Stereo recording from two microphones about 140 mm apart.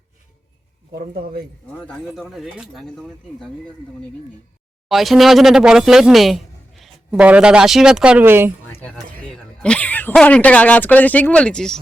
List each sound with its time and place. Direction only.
0.9 s a man's voice: 90° right
2.0 s speech: centre (ahead or behind)
4.9 s speech: centre (ahead or behind)
9.3 s speech: 5° left (ahead or behind)